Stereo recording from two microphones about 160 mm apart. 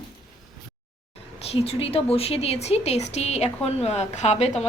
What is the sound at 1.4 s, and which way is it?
A woman's voice, 40° left (ahead or behind).